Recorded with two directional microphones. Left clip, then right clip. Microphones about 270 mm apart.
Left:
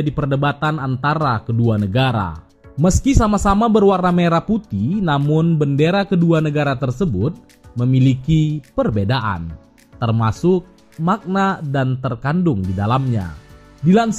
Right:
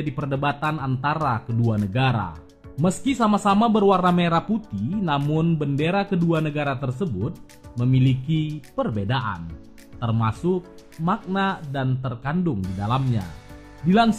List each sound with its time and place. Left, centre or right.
0.1 s speech: centre